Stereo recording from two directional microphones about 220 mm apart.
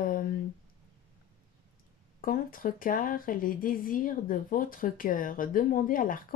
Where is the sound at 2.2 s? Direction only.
40° left (ahead or behind).